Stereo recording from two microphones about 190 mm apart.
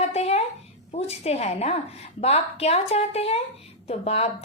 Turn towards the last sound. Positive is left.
turn(degrees=30)  # may be behind; listen again after turning